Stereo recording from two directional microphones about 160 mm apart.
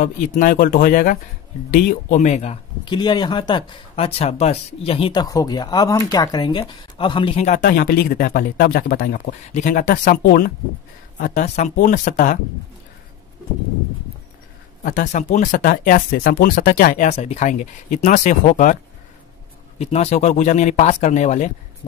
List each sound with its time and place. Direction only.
0.0 s speech: 55° left (ahead or behind)
2.8 s speech: 30° left (ahead or behind); by 7.7 s 50° left (ahead or behind)
7.7 s speech: 65° left (ahead or behind)
10.2 s speech: 65° left (ahead or behind)
11.1 s speech: 50° left (ahead or behind)
14.8 s speech: 60° left (ahead or behind)
19.8 s speech: 40° left (ahead or behind)